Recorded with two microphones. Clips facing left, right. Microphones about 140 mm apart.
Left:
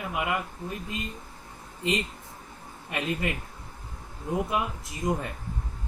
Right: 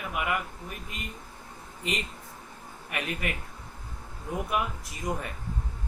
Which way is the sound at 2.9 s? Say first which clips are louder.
Left 3 dB; 20° left (ahead or behind).